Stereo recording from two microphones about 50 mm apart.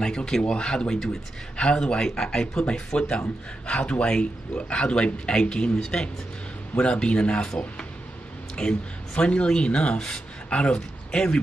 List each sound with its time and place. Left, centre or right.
0.0 s speech: centre